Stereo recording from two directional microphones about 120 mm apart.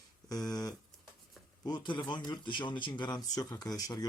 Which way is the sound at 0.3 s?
35° left (ahead or behind).